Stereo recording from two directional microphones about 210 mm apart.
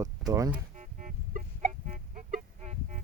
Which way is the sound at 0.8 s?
40° right (ahead or behind).